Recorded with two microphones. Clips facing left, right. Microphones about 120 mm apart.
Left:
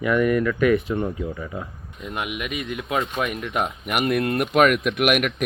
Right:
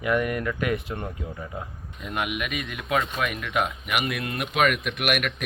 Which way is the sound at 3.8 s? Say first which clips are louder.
Left 6 dB; 45° left (ahead or behind).